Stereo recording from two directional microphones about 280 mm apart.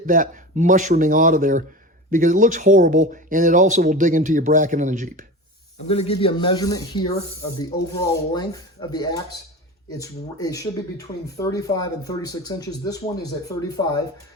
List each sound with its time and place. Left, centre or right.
0.0 s speech: right
5.9 s speech: left